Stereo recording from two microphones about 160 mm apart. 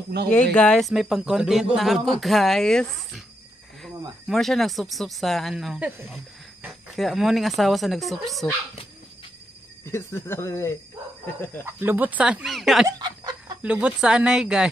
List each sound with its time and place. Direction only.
0.1 s speech: 90° right
0.6 s speech: 5° left (ahead or behind)
9.8 s speech: 15° left (ahead or behind)
11.6 s speech: 10° right (ahead or behind)
12.8 s a sound: 25° right (ahead or behind)
13.6 s speech: 10° right (ahead or behind)